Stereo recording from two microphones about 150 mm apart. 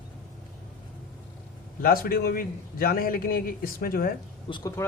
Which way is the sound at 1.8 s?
75° left (ahead or behind).